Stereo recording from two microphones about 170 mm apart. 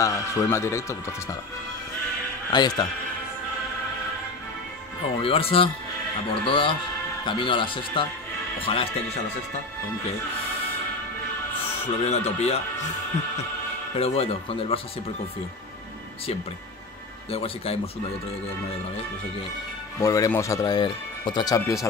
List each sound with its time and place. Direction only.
0.0 s speech: 20° left (ahead or behind)
2.5 s speech: 25° left (ahead or behind)
5.2 s speech: 35° left (ahead or behind)
11.8 s speech: 40° left (ahead or behind)
13.9 s speech: 35° left (ahead or behind)
17.3 s speech: 35° left (ahead or behind)
20.0 s speech: 20° left (ahead or behind)